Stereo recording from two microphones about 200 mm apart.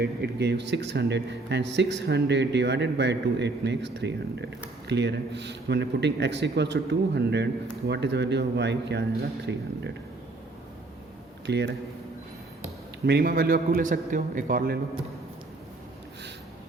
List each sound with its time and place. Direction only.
0.0 s a man's voice: 55° right (ahead or behind)
11.4 s a man's voice: 60° right (ahead or behind)
13.1 s a man's voice: 50° right (ahead or behind)